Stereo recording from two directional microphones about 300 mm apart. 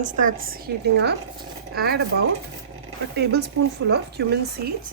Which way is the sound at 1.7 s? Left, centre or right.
Right.